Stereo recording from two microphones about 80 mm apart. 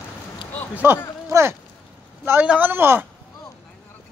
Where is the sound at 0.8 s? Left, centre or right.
Right.